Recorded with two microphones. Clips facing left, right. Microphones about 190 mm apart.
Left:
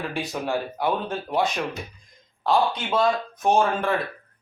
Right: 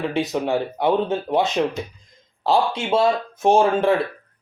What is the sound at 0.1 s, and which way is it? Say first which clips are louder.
Speech: right 6 dB; 20° right (ahead or behind).